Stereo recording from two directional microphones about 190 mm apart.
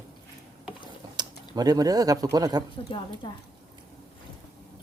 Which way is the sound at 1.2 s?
25° right (ahead or behind).